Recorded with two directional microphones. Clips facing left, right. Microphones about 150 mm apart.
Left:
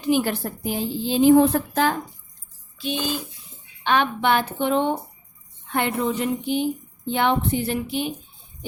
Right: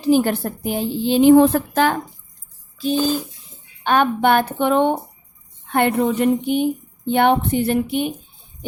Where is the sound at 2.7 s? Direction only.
40° right (ahead or behind).